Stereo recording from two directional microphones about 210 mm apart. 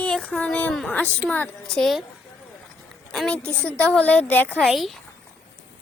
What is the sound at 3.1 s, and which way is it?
A woman's voice, 5° left (ahead or behind).